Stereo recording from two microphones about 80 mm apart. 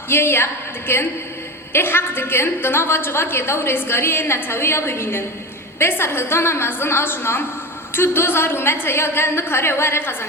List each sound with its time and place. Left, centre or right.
0.1 s a woman's voice: left